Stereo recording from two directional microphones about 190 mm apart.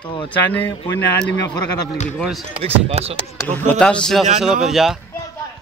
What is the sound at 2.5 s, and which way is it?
Speech, 30° right (ahead or behind).